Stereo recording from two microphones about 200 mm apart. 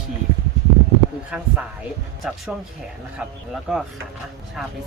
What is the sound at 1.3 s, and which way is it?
Speech, 5° right (ahead or behind).